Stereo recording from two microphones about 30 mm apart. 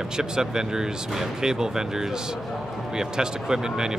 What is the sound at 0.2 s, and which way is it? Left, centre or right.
Speech, right.